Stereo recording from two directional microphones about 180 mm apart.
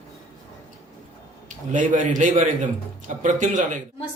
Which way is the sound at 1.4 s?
45° right (ahead or behind).